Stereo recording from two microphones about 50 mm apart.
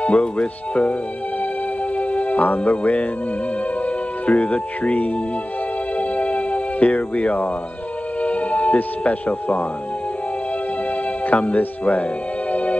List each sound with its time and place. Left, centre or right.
0.0 s speech: left
2.0 s speech: left
5.9 s music: left
8.2 s speech: left
11.2 s speech: left